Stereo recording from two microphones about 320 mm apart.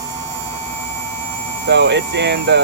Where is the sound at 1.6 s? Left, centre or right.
Right.